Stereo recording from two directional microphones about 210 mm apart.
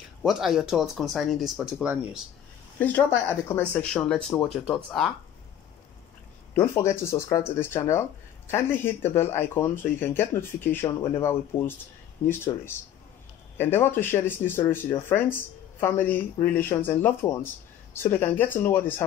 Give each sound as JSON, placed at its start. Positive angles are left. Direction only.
{"t": 0.2, "sound": "speech", "side_deg": 0}
{"t": 2.8, "sound": "speech", "side_deg": 10}
{"t": 6.5, "sound": "speech", "side_deg": 10}